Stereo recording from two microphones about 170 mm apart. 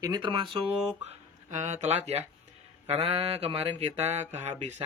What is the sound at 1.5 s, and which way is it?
Speech, 40° right (ahead or behind).